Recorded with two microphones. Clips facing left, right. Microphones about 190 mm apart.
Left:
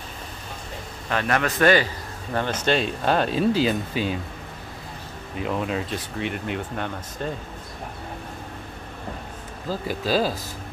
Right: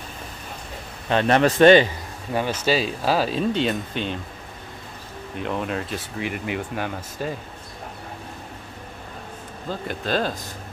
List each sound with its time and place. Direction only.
1.1 s a man's voice: 25° right (ahead or behind)
2.3 s speech: 10° right (ahead or behind)
5.3 s speech: centre (ahead or behind)
9.7 s speech: 5° left (ahead or behind)